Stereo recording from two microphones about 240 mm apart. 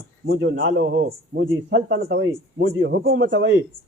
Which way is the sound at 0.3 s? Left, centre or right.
Right.